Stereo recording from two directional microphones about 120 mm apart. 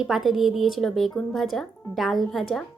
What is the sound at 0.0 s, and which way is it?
Speech, centre (ahead or behind).